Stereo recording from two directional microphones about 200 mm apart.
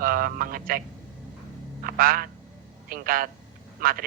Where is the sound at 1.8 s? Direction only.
45° right (ahead or behind).